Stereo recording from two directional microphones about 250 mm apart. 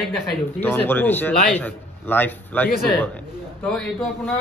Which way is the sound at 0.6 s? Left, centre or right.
Centre.